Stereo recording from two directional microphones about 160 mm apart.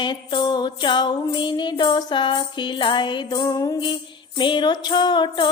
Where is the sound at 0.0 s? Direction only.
30° left (ahead or behind).